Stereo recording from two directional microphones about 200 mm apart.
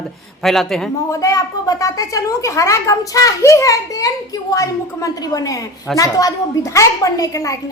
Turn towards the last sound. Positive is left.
turn(degrees=15)  # may be behind; listen again after turning